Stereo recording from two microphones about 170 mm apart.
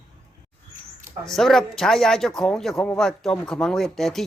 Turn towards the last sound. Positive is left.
turn(degrees=0)  # may be behind; listen again after turning